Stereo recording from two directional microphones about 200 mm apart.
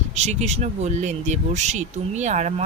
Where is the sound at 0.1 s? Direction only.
35° right (ahead or behind).